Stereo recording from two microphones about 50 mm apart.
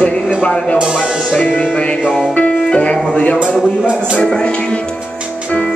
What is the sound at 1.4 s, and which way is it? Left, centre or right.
Music, left.